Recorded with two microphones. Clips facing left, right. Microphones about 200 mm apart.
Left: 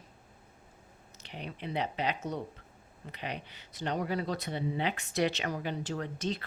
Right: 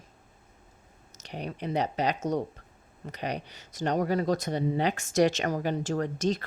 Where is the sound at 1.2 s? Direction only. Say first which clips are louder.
Right 6 dB; 45° right (ahead or behind).